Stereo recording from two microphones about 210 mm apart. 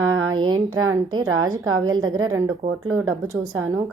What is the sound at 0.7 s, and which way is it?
A woman's voice, 80° right.